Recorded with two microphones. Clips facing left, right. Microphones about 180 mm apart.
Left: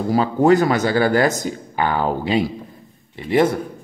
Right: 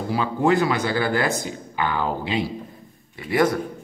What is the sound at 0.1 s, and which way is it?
Speech, 40° left (ahead or behind).